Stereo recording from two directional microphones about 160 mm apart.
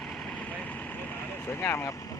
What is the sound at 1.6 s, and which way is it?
Speech, 20° left (ahead or behind).